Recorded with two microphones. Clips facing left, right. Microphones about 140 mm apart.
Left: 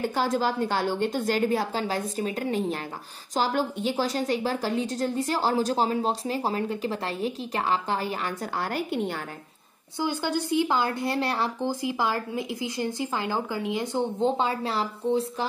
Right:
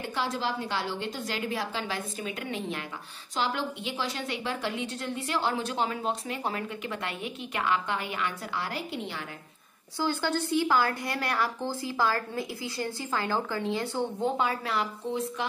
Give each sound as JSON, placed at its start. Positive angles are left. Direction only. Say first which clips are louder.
{"t": 0.0, "sound": "a woman's voice", "louder": "left 6 dB", "side_deg": 45}
{"t": 9.9, "sound": "speech", "louder": "left 1 dB", "side_deg": 15}